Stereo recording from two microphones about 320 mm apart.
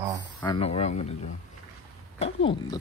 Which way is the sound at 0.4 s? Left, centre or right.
Centre.